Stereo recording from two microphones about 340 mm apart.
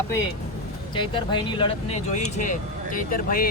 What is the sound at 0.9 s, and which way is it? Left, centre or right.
Speech, centre.